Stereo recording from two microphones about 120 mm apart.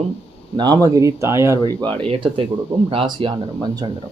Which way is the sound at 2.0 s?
50° right (ahead or behind).